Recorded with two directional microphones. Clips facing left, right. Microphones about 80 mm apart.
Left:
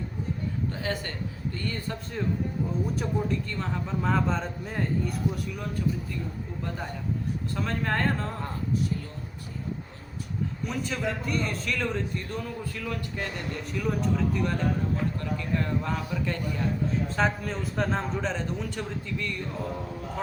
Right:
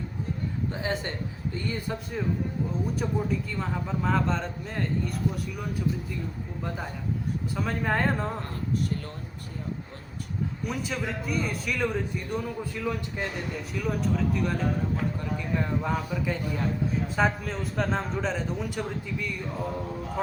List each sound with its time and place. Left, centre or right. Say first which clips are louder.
0.8 s a man's voice: right 1 dB; centre
7.5 s a man's voice: right 1 dB; centre
10.7 s a man's voice: left 2 dB; centre
13.7 s a man's voice: left 1 dB; centre
15.2 s a man's voice: even; centre